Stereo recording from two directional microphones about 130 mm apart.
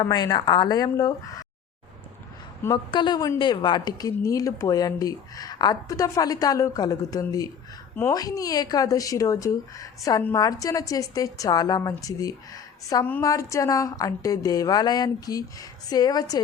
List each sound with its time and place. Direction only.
0.0 s speech: 30° left (ahead or behind)
2.6 s a woman's voice: 35° left (ahead or behind)